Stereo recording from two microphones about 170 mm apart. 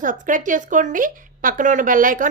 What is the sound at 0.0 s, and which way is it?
A woman's voice, 50° right (ahead or behind).